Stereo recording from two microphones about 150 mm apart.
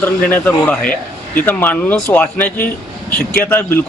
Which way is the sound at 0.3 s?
10° left (ahead or behind).